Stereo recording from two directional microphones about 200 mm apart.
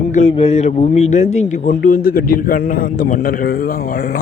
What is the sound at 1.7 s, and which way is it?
A man's voice, 45° left (ahead or behind).